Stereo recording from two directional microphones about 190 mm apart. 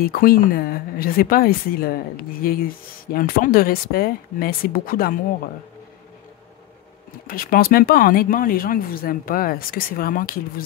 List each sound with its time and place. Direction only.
0.0 s speech: 50° left (ahead or behind)
7.2 s speech: 50° left (ahead or behind)